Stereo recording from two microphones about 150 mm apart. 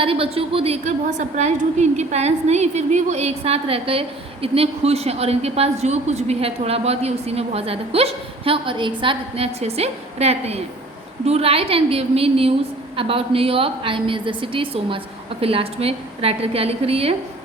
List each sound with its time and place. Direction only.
0.0 s a woman's voice: 40° right (ahead or behind)